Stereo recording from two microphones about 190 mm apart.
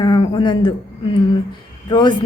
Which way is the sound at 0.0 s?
25° left (ahead or behind).